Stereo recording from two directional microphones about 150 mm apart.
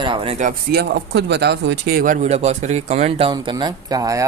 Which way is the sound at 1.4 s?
90° right.